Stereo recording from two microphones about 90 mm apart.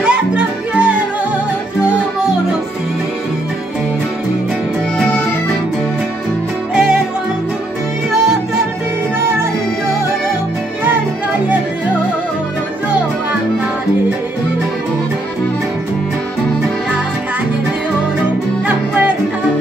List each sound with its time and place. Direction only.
0.0 s music: 10° right (ahead or behind)
6.7 s music: 10° right (ahead or behind)
18.7 s music: 20° right (ahead or behind)